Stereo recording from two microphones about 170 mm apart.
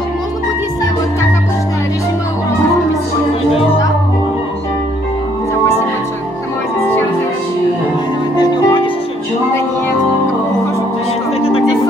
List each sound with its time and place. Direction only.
8.4 s music: 25° left (ahead or behind)